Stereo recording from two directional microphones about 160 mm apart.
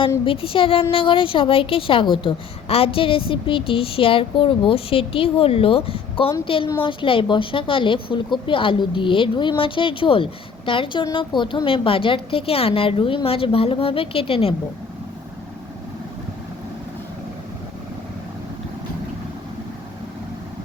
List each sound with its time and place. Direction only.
0.3 s a woman's voice: 35° left (ahead or behind)